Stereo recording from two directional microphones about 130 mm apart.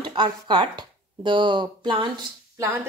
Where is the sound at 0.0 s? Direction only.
35° right (ahead or behind).